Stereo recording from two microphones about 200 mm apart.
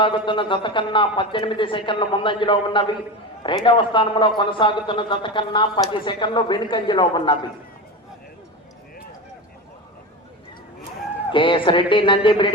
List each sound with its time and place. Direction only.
0.0 s a man's voice: 25° left (ahead or behind)
11.3 s a man's voice: 25° left (ahead or behind)